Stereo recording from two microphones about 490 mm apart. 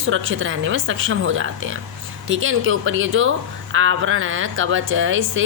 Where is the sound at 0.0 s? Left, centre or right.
Right.